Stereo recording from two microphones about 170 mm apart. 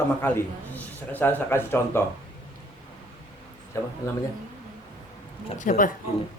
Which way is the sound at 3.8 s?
15° left (ahead or behind).